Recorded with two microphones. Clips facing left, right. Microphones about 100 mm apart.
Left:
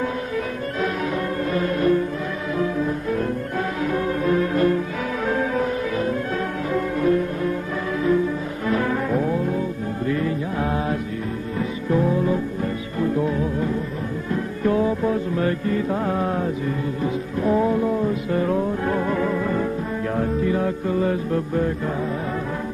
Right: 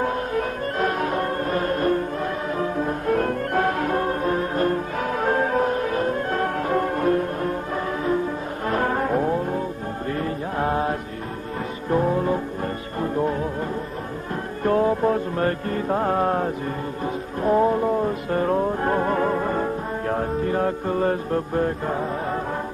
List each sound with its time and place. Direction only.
0.0 s music: 45° right (ahead or behind)
3.1 s music: 55° right (ahead or behind)
8.6 s brass instrument: 45° right (ahead or behind)
10.0 s music: 40° right (ahead or behind)